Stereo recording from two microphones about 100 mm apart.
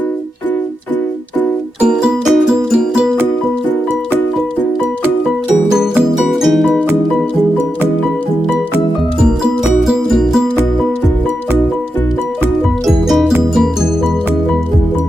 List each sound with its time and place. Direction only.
1.8 s music: 5° right (ahead or behind)
5.7 s music: 5° right (ahead or behind)
9.8 s music: centre (ahead or behind)
12.8 s music: centre (ahead or behind)